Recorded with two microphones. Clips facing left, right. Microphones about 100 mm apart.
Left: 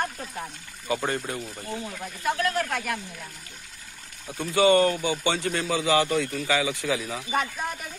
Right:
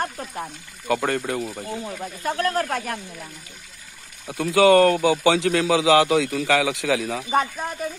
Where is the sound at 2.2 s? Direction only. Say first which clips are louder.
Right 2 dB; 40° right (ahead or behind).